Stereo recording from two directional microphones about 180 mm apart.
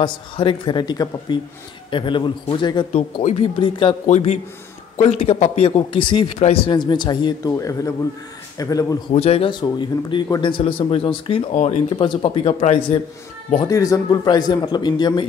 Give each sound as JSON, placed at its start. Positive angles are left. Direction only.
{"t": 0.0, "sound": "speech", "side_deg": 25}
{"t": 2.9, "sound": "a man's voice", "side_deg": 40}
{"t": 9.1, "sound": "a man's voice", "side_deg": 35}
{"t": 13.6, "sound": "speech", "side_deg": 20}